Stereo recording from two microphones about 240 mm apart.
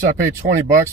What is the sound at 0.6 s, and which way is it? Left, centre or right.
Speech, centre.